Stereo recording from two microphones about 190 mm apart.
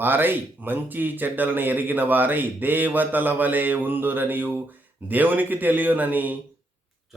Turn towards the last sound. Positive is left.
turn(degrees=-10)  # may be behind; listen again after turning